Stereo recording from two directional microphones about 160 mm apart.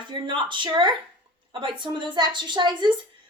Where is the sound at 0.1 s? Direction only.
30° right (ahead or behind).